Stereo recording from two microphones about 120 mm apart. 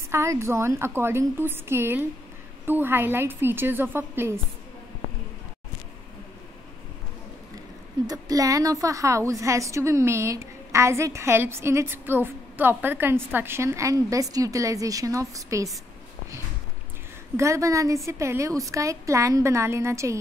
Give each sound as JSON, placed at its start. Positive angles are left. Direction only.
{"t": 0.1, "sound": "a woman's voice", "side_deg": -25}
{"t": 8.1, "sound": "a woman's voice", "side_deg": -30}
{"t": 17.4, "sound": "a woman's voice", "side_deg": -25}